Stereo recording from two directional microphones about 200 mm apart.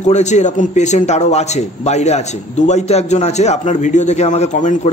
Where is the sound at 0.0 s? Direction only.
35° left (ahead or behind).